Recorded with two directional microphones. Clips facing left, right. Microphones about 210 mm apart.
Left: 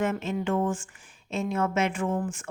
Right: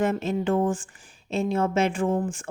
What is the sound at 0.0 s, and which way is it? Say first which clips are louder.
Speech: right 3 dB; 35° right (ahead or behind).